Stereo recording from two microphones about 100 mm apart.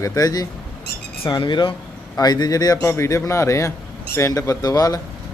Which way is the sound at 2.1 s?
40° left (ahead or behind).